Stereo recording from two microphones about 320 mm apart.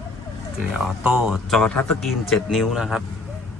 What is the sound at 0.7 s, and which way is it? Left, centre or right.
Speech, centre.